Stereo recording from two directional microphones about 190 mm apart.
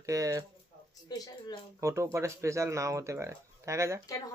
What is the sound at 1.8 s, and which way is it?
Speech, 15° right (ahead or behind).